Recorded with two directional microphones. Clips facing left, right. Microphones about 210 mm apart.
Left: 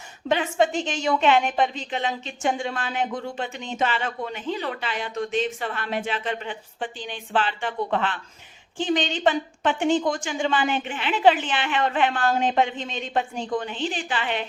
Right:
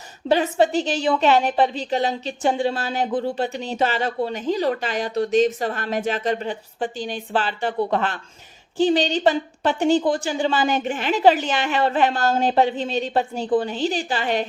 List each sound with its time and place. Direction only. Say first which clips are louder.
0.3 s a woman's voice: right 4 dB; 35° right (ahead or behind)